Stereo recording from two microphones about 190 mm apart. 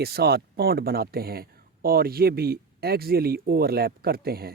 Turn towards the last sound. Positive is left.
turn(degrees=-55)  # may be behind; listen again after turning